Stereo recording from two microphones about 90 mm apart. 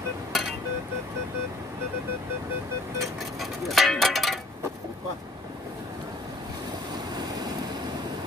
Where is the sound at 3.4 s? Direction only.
Centre (ahead or behind).